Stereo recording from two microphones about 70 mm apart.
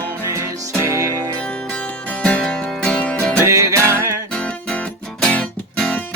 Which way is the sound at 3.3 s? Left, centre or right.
Right.